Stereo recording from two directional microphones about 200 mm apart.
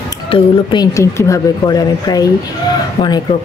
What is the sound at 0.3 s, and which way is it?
Speech, 20° left (ahead or behind).